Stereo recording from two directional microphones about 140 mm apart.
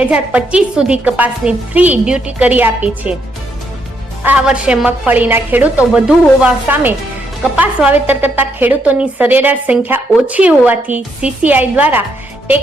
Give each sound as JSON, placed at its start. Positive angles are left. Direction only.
{"t": 0.0, "sound": "a woman's voice", "side_deg": -10}
{"t": 4.2, "sound": "a woman's voice", "side_deg": -10}